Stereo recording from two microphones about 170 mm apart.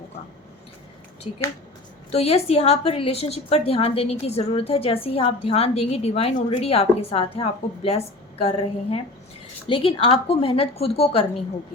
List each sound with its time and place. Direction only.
2.0 s a woman's voice: 40° left (ahead or behind)